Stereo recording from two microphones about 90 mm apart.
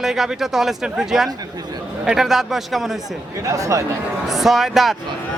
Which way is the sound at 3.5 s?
35° right (ahead or behind).